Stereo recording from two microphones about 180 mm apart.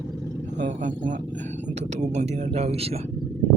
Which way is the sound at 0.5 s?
45° right (ahead or behind).